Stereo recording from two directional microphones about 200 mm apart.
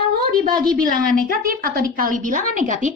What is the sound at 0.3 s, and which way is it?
A woman's voice, 45° right (ahead or behind).